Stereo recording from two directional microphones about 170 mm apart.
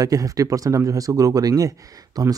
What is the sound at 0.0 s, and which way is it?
Speech, 20° right (ahead or behind).